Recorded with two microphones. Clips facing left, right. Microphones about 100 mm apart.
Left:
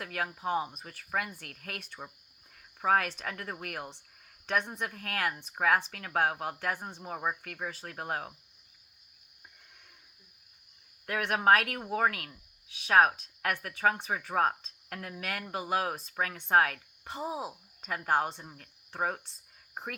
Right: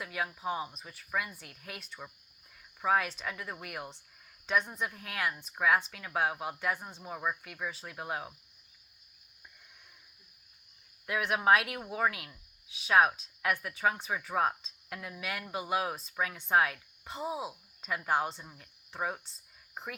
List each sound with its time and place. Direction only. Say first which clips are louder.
0.0 s speech: left 1 dB; 50° left (ahead or behind)
7.0 s speech: left 1 dB; 40° left (ahead or behind)
11.0 s a woman's voice: left 2 dB; 50° left (ahead or behind)
17.2 s speech: even; 30° left (ahead or behind)
17.8 s speech: left 2 dB; 45° left (ahead or behind)